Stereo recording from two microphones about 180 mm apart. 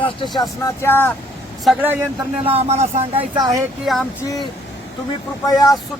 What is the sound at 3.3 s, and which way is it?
Speech, 25° right (ahead or behind).